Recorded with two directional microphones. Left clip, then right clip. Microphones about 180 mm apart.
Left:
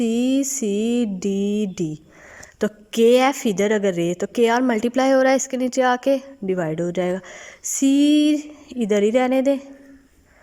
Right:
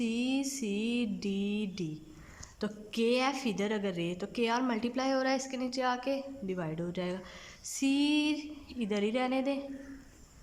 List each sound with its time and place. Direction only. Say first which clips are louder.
0.0 s mantra: left 12 dB; 40° left (ahead or behind)
2.6 s a woman's voice: left 15 dB; 45° left (ahead or behind)